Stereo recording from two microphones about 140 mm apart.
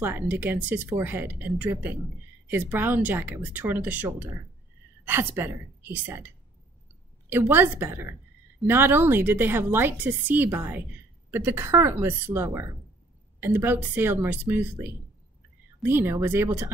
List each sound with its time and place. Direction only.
0.0 s a woman's voice: 15° right (ahead or behind)